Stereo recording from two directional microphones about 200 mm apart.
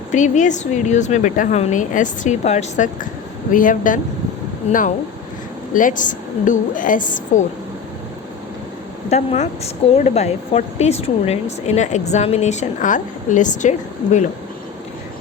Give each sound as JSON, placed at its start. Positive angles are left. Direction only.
{"t": 0.1, "sound": "speech", "side_deg": 40}
{"t": 9.0, "sound": "speech", "side_deg": 35}